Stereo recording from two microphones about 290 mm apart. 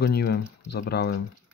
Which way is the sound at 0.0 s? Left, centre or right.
Left.